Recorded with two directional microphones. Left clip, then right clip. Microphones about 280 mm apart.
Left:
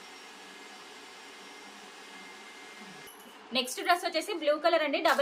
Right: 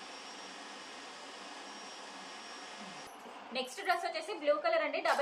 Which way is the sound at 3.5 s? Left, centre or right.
Left.